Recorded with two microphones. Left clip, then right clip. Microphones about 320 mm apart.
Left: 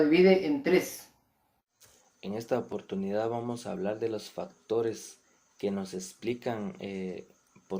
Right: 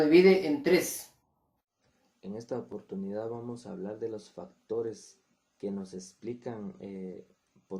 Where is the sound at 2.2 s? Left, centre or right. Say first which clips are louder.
Left 6 dB; right.